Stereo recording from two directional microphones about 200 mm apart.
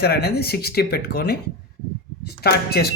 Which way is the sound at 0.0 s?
50° left (ahead or behind).